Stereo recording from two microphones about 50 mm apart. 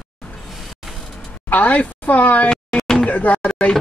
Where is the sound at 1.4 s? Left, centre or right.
Left.